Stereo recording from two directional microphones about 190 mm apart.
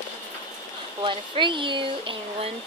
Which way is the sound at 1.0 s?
25° right (ahead or behind).